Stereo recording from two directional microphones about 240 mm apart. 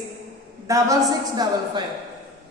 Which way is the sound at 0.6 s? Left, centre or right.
Centre.